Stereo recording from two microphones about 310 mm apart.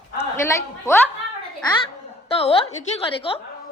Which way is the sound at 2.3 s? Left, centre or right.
Centre.